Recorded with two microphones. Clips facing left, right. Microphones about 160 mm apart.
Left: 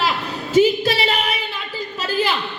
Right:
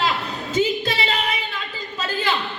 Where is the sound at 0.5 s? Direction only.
20° right (ahead or behind).